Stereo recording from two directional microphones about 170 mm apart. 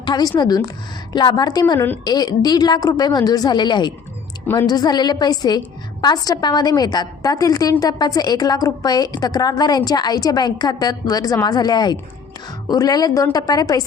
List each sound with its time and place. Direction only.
0.0 s a woman's voice: 25° left (ahead or behind)